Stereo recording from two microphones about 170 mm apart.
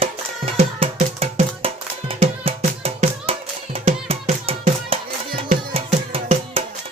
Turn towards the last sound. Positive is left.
turn(degrees=-40)  # may be behind; listen again after turning